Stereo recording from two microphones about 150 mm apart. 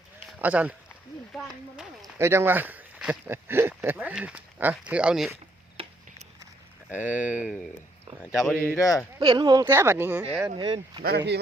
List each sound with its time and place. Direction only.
0.3 s speech: 10° right (ahead or behind)
2.1 s speech: 15° right (ahead or behind)
5.8 s a sound: 35° right (ahead or behind)
6.9 s speech: 10° right (ahead or behind)
8.8 s speech: 20° left (ahead or behind)
9.2 s speech: 30° right (ahead or behind)
9.6 s speech: 15° right (ahead or behind)
10.6 s speech: 30° right (ahead or behind)
11.0 s speech: 90° right